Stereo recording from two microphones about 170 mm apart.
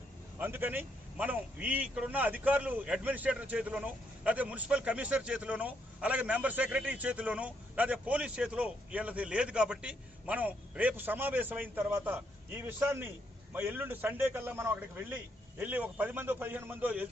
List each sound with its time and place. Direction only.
0.3 s a man's voice: 10° right (ahead or behind)